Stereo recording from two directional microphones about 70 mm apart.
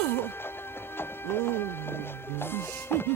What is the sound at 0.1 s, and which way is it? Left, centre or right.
Music, left.